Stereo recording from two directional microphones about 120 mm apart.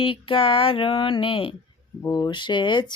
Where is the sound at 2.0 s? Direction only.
35° left (ahead or behind).